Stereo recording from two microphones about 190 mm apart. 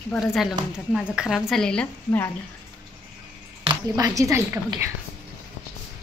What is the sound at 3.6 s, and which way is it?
Speech, 20° right (ahead or behind).